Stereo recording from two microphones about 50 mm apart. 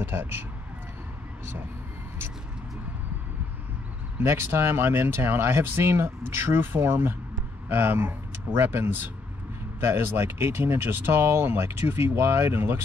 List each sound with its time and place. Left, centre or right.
0.0 s speech: right
4.2 s speech: right